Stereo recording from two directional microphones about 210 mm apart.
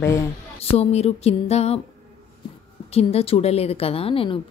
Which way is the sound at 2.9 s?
30° left (ahead or behind).